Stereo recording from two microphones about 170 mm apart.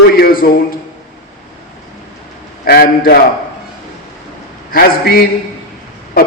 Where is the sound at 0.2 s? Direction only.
60° left (ahead or behind).